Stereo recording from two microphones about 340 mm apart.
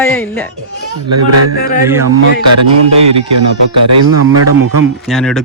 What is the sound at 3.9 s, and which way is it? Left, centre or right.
Speech, right.